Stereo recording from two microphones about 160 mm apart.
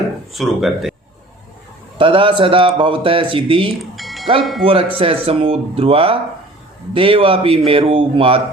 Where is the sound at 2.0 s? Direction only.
30° right (ahead or behind).